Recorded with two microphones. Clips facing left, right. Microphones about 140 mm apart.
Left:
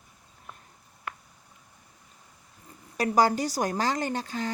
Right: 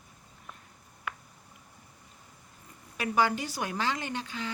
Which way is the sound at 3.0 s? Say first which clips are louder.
Left 5 dB; 40° left (ahead or behind).